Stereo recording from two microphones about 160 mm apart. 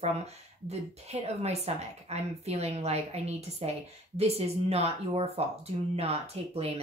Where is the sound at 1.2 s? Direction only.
40° right (ahead or behind).